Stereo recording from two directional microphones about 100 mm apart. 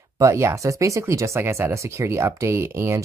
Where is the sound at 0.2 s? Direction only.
30° right (ahead or behind).